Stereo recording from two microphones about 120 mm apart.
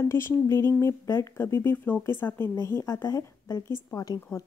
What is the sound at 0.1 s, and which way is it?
Speech, 20° left (ahead or behind).